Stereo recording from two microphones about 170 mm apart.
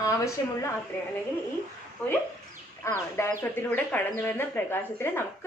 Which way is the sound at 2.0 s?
10° left (ahead or behind).